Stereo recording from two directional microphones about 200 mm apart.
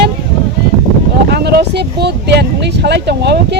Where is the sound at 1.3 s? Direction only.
55° right (ahead or behind).